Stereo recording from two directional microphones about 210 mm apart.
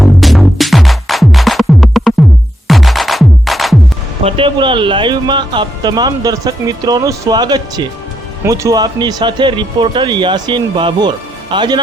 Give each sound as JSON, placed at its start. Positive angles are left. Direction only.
{"t": 0.0, "sound": "music", "side_deg": 0}
{"t": 4.2, "sound": "speech", "side_deg": -25}